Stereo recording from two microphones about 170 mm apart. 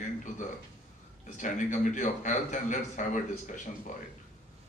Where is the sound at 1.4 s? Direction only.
50° left (ahead or behind).